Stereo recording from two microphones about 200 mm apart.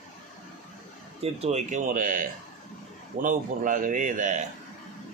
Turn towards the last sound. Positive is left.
turn(degrees=-40)  # may be behind; listen again after turning